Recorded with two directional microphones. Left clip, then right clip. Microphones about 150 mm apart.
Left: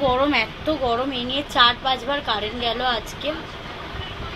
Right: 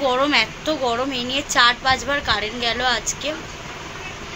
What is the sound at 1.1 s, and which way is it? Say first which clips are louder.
Speech: right 1 dB; 55° right (ahead or behind).